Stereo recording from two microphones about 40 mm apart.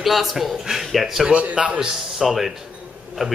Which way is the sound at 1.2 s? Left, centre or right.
Right.